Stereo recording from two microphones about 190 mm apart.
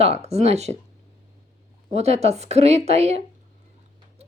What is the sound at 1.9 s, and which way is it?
A woman's voice, 35° right (ahead or behind).